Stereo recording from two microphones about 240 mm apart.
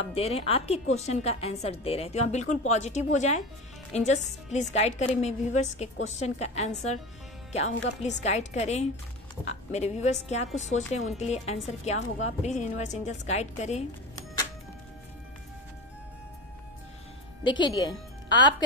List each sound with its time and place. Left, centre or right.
0.1 s a woman's voice: left
8.0 s a woman's voice: left
17.4 s a woman's voice: centre